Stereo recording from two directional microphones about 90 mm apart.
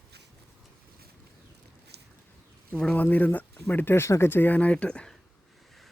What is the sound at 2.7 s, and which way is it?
Speech, 10° left (ahead or behind).